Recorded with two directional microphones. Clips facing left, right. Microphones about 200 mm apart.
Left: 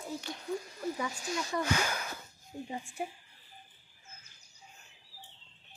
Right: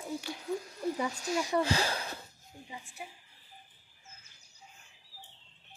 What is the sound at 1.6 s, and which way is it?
Speech, 30° right (ahead or behind).